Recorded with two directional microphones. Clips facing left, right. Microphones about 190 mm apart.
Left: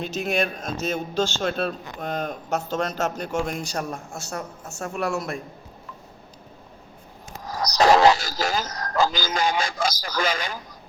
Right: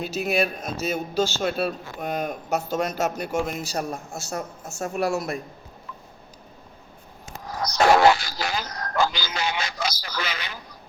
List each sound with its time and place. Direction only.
0.0 s a man's voice: 5° right (ahead or behind)
4.8 s speech: 35° right (ahead or behind)
7.4 s a sound: 40° left (ahead or behind)